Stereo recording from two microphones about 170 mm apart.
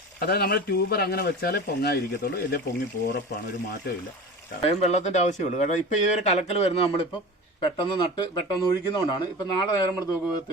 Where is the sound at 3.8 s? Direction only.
70° left (ahead or behind).